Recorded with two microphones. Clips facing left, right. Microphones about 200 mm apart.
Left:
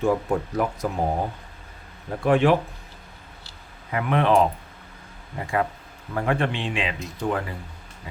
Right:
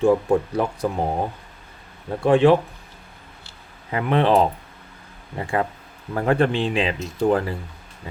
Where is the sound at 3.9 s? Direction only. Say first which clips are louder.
Right 3 dB; 30° right (ahead or behind).